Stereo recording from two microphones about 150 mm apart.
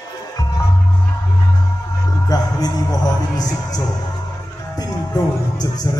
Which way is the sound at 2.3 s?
25° left (ahead or behind).